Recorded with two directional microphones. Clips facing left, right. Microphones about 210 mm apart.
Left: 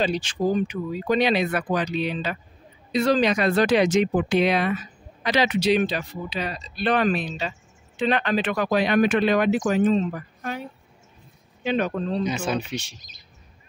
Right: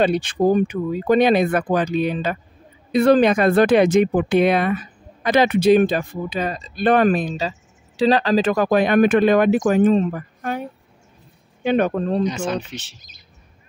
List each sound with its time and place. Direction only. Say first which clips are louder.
0.0 s speech: right 6 dB; 60° right (ahead or behind)
11.6 s speech: right 5 dB; 55° right (ahead or behind)
12.3 s speech: right 2 dB; 10° left (ahead or behind)